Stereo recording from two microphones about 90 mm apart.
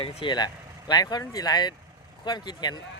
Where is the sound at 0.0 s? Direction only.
85° left.